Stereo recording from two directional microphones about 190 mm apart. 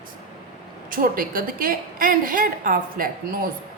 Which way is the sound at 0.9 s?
50° right (ahead or behind).